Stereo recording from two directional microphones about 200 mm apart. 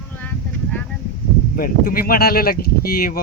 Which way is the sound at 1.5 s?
45° left (ahead or behind).